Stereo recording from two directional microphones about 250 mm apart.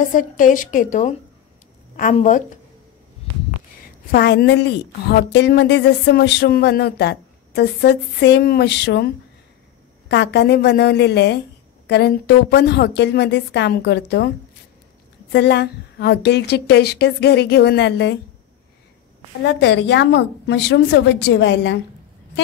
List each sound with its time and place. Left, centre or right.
0.0 s a woman's voice: left
4.1 s speech: left
15.3 s speech: left
19.4 s a woman's voice: left